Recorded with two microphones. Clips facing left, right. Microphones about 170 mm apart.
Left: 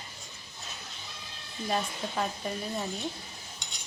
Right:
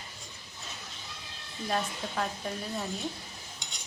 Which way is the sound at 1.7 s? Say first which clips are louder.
Left 1 dB; 5° left (ahead or behind).